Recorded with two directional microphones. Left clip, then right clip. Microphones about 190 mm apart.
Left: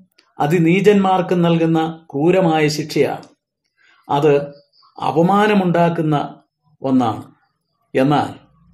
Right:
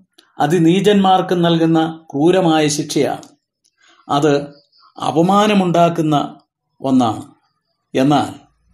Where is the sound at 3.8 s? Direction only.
20° right (ahead or behind).